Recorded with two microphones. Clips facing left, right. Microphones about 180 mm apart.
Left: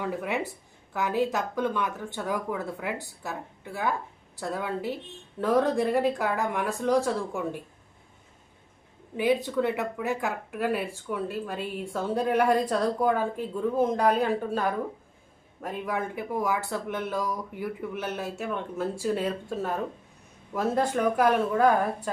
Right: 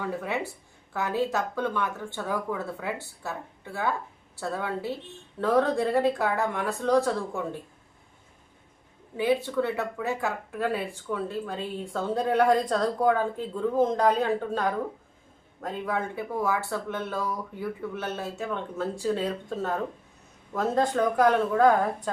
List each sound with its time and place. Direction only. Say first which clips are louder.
0.0 s speech: left 1 dB; 15° left (ahead or behind)
9.1 s speech: even; 15° left (ahead or behind)
15.6 s speech: right 1 dB; 10° left (ahead or behind)